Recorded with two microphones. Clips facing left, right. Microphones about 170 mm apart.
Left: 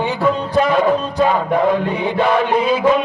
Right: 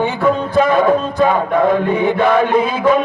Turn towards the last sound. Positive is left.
turn(degrees=-50)  # may be behind; listen again after turning